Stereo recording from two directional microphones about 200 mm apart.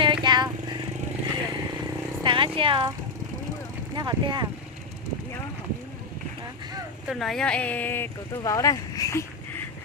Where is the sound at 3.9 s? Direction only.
20° right (ahead or behind).